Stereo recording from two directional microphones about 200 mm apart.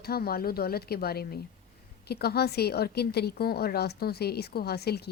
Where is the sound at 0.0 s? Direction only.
50° left (ahead or behind).